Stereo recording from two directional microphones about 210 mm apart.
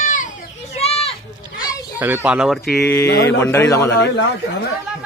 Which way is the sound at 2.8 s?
15° left (ahead or behind).